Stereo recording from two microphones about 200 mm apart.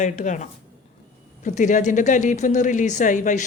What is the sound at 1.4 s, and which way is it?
Speech, 40° left (ahead or behind).